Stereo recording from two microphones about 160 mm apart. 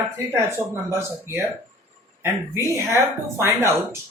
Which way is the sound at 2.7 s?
15° right (ahead or behind).